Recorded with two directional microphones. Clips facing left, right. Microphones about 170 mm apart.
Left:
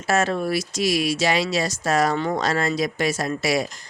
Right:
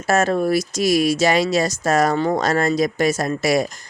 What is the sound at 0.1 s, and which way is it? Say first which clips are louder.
Speech: right 4 dB; 45° right (ahead or behind).